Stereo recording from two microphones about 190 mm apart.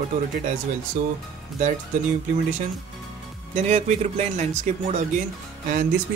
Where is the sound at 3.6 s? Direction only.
35° right (ahead or behind).